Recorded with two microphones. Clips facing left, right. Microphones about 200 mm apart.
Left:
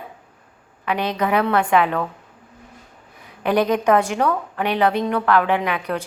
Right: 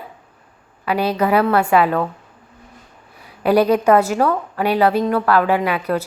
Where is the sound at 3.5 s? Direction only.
10° right (ahead or behind).